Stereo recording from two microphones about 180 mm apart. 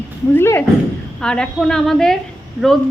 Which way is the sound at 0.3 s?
15° left (ahead or behind).